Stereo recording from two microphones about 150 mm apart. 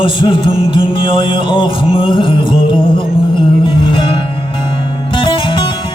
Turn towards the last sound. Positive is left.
turn(degrees=35)  # may be behind; listen again after turning